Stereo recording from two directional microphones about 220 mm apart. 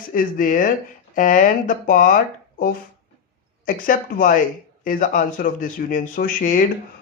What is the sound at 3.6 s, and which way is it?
Speech, 40° left (ahead or behind).